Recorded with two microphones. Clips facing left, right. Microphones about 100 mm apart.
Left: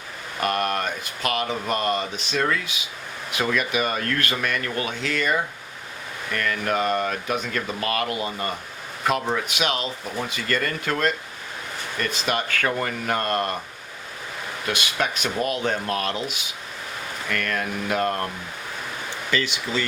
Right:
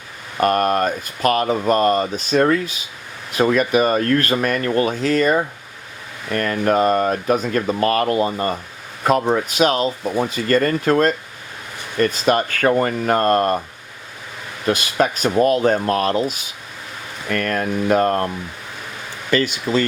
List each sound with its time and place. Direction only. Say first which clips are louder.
0.3 s speech: right 7 dB; 45° right (ahead or behind)
14.7 s speech: right 8 dB; 40° right (ahead or behind)
19.3 s speech: right 8 dB; 45° right (ahead or behind)